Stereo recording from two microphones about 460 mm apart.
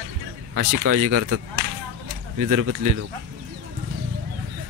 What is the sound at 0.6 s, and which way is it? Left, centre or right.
Speech, right.